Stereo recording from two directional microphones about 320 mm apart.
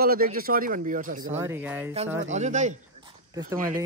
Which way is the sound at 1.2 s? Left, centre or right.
Centre.